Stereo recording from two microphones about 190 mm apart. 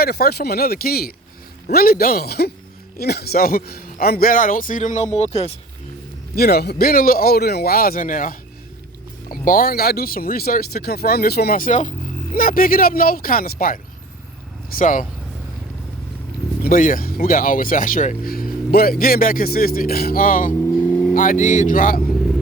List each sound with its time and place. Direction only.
0.0 s speech: 55° left (ahead or behind); by 5.5 s 35° left (ahead or behind)
6.3 s speech: 55° left (ahead or behind)
16.6 s speech: 50° left (ahead or behind)